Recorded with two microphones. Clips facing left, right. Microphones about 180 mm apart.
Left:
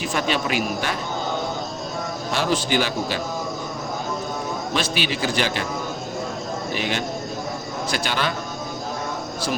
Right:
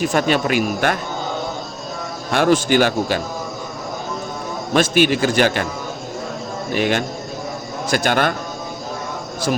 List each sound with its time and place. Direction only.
0.0 s speech: 50° right (ahead or behind)
2.3 s speech: 55° right (ahead or behind)
4.7 s speech: 50° right (ahead or behind)
6.7 s speech: 50° right (ahead or behind)